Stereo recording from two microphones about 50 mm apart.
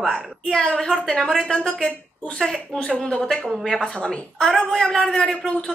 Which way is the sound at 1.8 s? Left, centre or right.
Left.